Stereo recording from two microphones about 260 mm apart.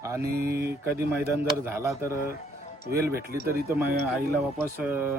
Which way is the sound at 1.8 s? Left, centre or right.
Centre.